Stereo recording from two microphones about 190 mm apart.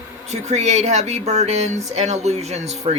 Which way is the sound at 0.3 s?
35° right (ahead or behind).